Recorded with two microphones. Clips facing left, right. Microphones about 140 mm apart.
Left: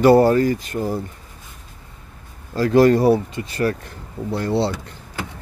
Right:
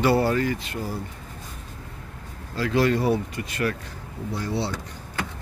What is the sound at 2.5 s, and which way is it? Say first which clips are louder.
Speech: left 8 dB; 40° left (ahead or behind).